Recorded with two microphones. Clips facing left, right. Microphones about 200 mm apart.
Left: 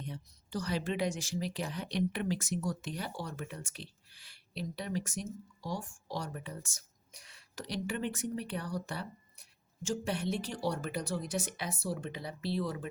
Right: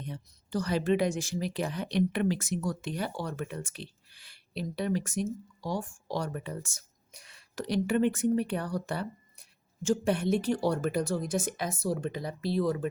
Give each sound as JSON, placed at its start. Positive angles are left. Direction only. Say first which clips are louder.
{"t": 0.1, "sound": "speech", "louder": "right 7 dB", "side_deg": -50}